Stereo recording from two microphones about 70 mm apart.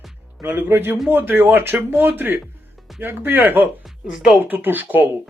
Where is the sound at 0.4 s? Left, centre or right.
Right.